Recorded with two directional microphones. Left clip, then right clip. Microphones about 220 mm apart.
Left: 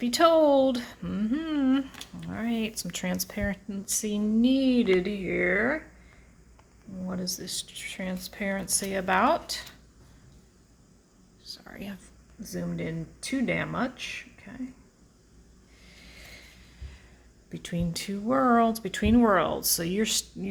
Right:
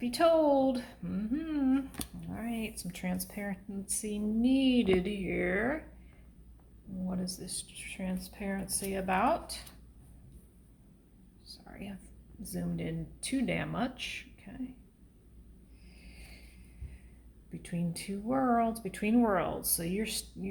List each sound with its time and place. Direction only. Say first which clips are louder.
0.0 s speech: left 6 dB; 35° left (ahead or behind); by 5.8 s 20° left (ahead or behind)
7.1 s speech: left 8 dB; 25° left (ahead or behind)
11.4 s whispering: left 6 dB; 30° left (ahead or behind)
12.4 s speech: left 5 dB; 20° left (ahead or behind)
17.5 s speech: left 6 dB; 35° left (ahead or behind)